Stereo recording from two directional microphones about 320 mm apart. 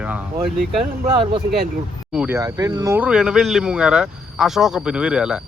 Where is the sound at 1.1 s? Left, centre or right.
Centre.